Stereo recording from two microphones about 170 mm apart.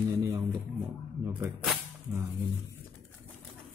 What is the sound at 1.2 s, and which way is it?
Speech, 15° right (ahead or behind).